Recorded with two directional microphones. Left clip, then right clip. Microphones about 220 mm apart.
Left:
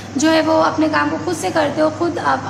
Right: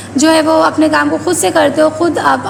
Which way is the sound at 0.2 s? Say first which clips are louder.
Right 5 dB; 25° right (ahead or behind).